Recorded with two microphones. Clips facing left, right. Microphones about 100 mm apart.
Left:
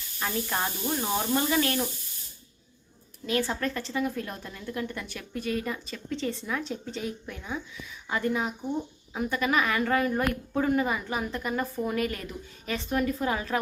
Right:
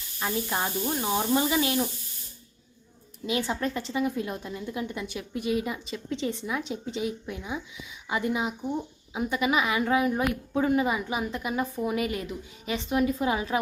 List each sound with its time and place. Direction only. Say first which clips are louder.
0.2 s a woman's voice: right 1 dB; 15° right (ahead or behind)
3.2 s a woman's voice: even; 15° right (ahead or behind)